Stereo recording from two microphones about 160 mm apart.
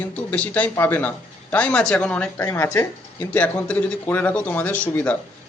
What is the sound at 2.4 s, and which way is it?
Speech, 20° left (ahead or behind).